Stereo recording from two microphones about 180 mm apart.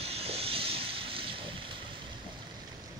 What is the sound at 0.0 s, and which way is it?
Vehicle, 35° right (ahead or behind).